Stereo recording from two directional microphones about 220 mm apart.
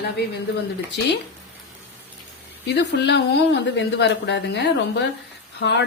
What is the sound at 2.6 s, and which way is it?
Speech, 50° left (ahead or behind).